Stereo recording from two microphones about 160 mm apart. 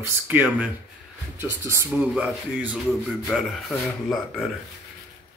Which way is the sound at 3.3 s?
5° left (ahead or behind).